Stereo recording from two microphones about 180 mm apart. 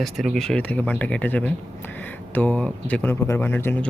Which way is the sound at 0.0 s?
Centre (ahead or behind).